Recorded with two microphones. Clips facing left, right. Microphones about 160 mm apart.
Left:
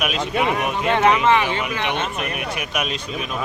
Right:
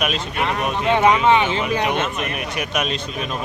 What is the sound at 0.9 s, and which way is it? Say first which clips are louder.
Speech: right 1 dB; 15° right (ahead or behind).